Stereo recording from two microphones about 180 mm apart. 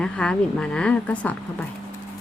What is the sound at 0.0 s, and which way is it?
A woman's voice, 5° left (ahead or behind).